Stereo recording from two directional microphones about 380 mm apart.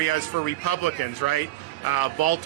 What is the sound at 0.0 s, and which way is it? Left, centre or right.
Speech, left.